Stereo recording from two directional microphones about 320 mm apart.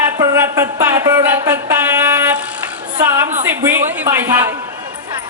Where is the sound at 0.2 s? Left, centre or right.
Centre.